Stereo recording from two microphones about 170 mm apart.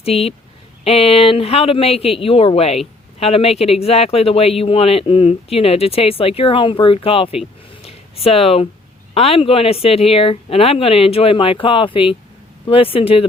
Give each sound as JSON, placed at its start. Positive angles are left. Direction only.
{"t": 0.0, "sound": "speech", "side_deg": 35}
{"t": 7.8, "sound": "a sound", "side_deg": 35}
{"t": 9.1, "sound": "speech", "side_deg": 35}